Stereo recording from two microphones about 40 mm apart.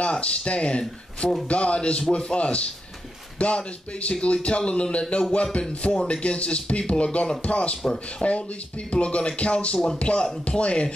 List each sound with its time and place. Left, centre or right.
0.0 s speech: left